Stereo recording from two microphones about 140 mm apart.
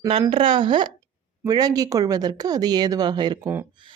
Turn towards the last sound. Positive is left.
turn(degrees=-30)  # may be behind; listen again after turning